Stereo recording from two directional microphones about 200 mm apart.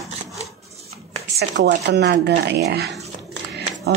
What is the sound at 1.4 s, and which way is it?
Speech, 55° right (ahead or behind).